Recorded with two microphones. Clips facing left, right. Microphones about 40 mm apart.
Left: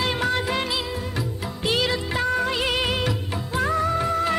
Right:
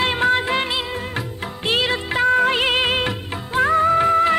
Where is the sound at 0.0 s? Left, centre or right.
Right.